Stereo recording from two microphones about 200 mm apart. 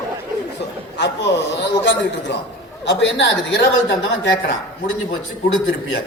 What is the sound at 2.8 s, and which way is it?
A man's voice, 60° left (ahead or behind).